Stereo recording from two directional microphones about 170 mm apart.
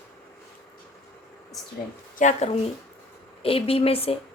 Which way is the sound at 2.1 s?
45° left (ahead or behind).